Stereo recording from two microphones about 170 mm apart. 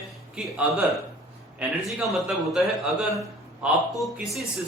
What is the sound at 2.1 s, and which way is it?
Speech, centre (ahead or behind).